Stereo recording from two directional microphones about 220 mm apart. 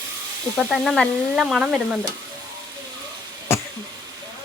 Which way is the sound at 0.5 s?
5° left (ahead or behind).